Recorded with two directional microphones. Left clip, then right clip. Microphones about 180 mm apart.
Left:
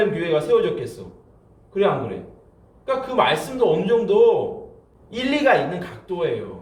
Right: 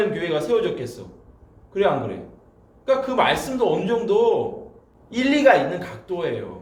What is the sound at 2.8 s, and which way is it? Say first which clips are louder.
A man's voice: right 1 dB; 30° right (ahead or behind).